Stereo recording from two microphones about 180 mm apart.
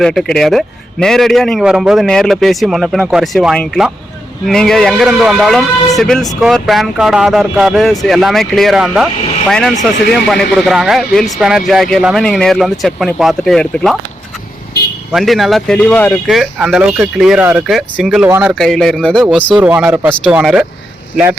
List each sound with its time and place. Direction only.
0.0 s a man's voice: centre (ahead or behind)
15.1 s a man's voice: centre (ahead or behind)
18.3 s speech: 10° right (ahead or behind)
18.5 s a man's voice: centre (ahead or behind)
19.5 s speech: 10° right (ahead or behind)